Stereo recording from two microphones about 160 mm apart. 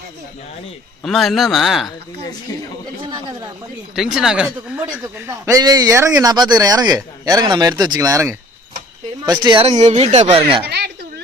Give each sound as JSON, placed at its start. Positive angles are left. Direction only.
{"t": 1.0, "sound": "speech", "side_deg": 0}
{"t": 2.5, "sound": "speech", "side_deg": 25}
{"t": 3.9, "sound": "speech", "side_deg": -5}
{"t": 5.1, "sound": "speech", "side_deg": -15}
{"t": 10.7, "sound": "speech", "side_deg": -90}